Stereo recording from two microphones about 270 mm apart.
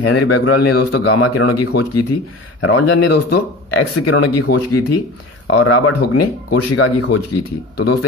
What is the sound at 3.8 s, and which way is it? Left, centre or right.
Speech, left.